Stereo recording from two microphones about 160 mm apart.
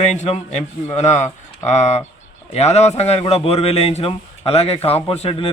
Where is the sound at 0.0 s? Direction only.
45° left (ahead or behind).